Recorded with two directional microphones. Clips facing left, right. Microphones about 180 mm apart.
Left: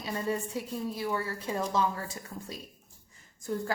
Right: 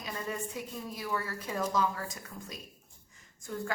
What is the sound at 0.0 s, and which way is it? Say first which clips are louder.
A woman's voice: left 5 dB; 30° left (ahead or behind).